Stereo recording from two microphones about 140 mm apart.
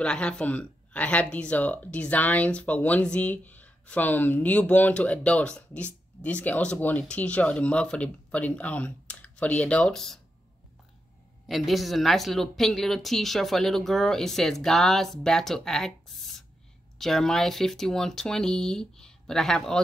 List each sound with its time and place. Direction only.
0.0 s speech: 5° left (ahead or behind)
11.4 s a woman's voice: centre (ahead or behind)